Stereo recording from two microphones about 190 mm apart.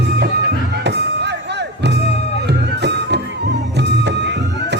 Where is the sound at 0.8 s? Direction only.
60° right (ahead or behind).